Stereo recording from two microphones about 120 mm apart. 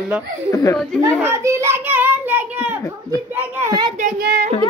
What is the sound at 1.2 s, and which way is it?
Child singing, 25° right (ahead or behind).